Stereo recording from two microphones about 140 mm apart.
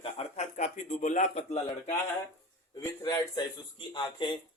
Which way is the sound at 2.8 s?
20° left (ahead or behind).